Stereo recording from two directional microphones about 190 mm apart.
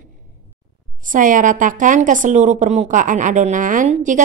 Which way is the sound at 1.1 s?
45° right (ahead or behind).